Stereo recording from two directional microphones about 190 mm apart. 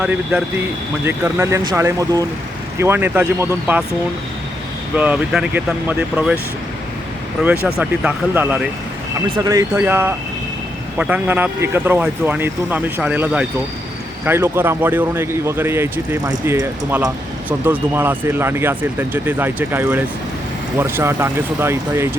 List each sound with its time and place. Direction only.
0.0 s speech: 10° right (ahead or behind)
4.9 s speech: 5° right (ahead or behind)
7.4 s speech: 5° right (ahead or behind)